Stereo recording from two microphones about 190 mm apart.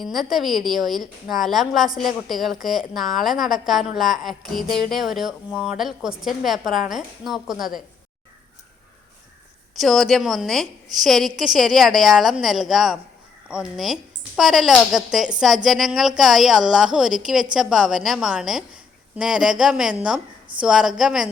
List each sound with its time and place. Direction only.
0.0 s speech: centre (ahead or behind)
9.7 s speech: centre (ahead or behind)